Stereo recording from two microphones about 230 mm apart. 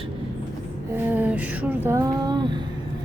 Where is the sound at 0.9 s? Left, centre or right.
Centre.